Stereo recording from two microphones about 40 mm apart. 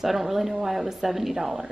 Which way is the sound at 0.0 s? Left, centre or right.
Centre.